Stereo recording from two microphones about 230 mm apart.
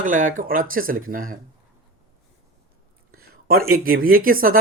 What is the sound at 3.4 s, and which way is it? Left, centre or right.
Speech, right.